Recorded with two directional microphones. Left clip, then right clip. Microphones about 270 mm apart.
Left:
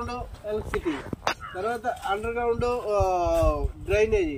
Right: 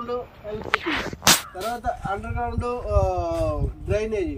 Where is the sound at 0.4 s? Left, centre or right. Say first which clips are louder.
Left 3 dB; centre.